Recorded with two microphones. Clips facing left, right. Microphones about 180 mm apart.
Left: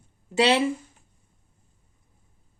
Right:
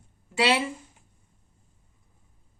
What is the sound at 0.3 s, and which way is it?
Speech, 20° left (ahead or behind).